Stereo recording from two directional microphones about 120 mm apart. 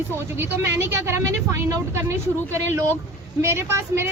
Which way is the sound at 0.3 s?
20° right (ahead or behind).